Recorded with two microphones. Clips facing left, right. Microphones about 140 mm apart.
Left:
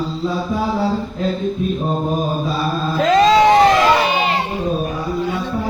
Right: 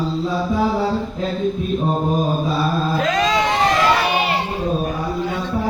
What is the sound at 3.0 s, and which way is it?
Music, 35° left (ahead or behind).